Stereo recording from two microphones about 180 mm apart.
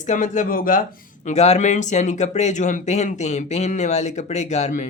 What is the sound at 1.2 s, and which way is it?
Speech, 40° left (ahead or behind).